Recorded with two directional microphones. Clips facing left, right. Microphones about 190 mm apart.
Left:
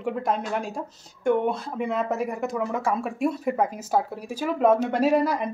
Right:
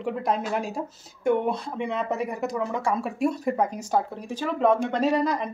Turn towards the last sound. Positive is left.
turn(degrees=10)  # may be behind; listen again after turning